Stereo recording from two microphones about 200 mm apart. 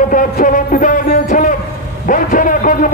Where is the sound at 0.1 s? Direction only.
40° left (ahead or behind).